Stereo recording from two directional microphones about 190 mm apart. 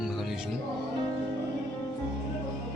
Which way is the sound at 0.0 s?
Centre (ahead or behind).